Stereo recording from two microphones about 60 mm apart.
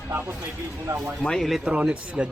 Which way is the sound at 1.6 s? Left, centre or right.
Centre.